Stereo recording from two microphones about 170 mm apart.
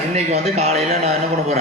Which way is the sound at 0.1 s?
40° right (ahead or behind).